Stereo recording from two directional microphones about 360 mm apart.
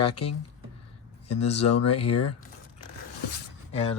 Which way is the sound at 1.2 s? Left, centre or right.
Centre.